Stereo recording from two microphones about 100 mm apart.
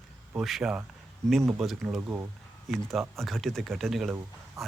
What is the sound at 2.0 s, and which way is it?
Speech, 25° right (ahead or behind).